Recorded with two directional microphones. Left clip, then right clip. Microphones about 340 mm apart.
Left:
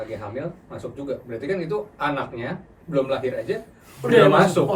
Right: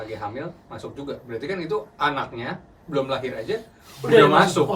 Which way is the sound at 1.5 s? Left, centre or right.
Centre.